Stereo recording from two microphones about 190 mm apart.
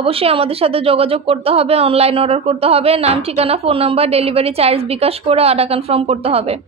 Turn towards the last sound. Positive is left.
turn(degrees=-30)  # may be behind; listen again after turning